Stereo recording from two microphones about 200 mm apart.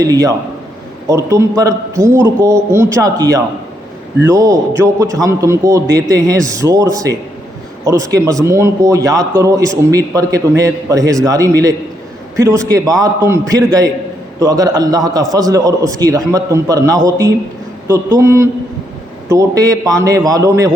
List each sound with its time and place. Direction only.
0.0 s a man's voice: 15° right (ahead or behind)
7.9 s a man's voice: 15° right (ahead or behind)